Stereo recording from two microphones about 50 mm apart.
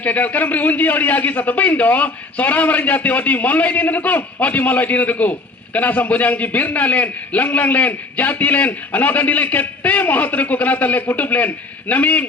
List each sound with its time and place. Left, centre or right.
0.0 s a man's voice: left